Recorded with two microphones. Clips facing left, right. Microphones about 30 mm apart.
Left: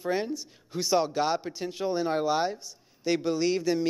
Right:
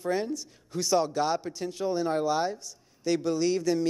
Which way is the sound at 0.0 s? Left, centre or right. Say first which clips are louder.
Even; left.